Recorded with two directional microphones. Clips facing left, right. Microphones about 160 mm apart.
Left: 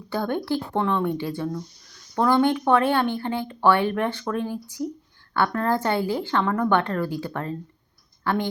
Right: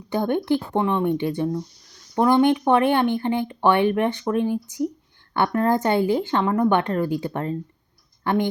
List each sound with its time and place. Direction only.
0.1 s speech: 20° right (ahead or behind)